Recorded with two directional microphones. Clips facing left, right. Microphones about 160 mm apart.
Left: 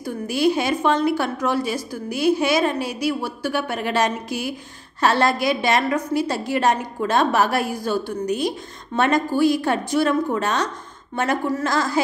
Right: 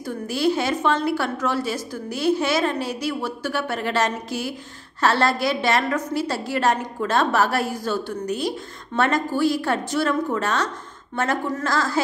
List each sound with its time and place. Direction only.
0.0 s a woman's voice: 15° left (ahead or behind)